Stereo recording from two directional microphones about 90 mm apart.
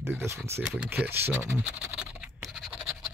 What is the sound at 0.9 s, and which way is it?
Speech, 20° right (ahead or behind).